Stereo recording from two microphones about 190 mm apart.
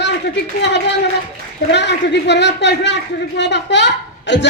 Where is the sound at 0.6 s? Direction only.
65° left (ahead or behind).